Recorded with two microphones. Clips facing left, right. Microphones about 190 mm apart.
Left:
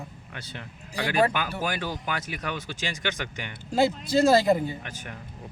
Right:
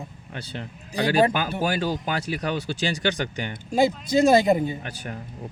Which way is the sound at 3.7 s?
15° right (ahead or behind).